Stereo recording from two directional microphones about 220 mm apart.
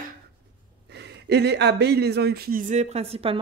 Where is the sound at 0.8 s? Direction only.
50° right (ahead or behind).